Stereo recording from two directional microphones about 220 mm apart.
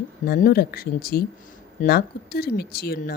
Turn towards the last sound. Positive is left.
turn(degrees=45)  # may be behind; listen again after turning